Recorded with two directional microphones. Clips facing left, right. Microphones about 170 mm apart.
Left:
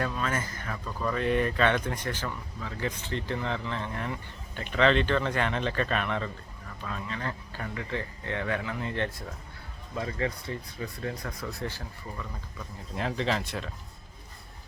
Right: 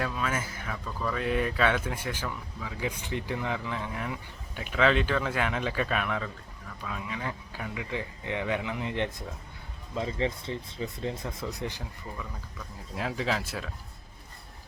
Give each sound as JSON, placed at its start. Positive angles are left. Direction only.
{"t": 0.0, "sound": "speech", "side_deg": -5}
{"t": 12.1, "sound": "speech", "side_deg": 0}